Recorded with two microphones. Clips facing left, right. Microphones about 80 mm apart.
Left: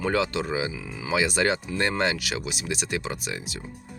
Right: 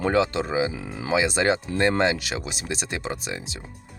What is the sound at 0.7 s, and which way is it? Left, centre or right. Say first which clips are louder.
Speech: right 3 dB; right.